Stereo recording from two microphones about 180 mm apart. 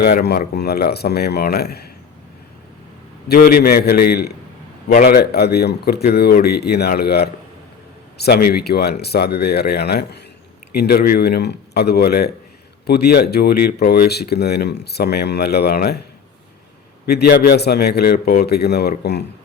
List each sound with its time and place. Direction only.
0.0 s speech: 60° left (ahead or behind)
3.2 s speech: 55° left (ahead or behind)
17.1 s speech: 65° left (ahead or behind)